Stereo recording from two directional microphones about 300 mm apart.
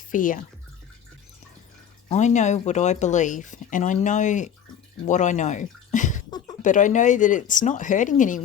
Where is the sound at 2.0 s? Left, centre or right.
Left.